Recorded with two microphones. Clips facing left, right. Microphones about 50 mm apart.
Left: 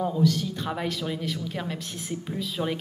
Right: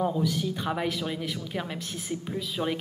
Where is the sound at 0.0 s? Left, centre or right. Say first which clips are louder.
Left 2 dB; centre.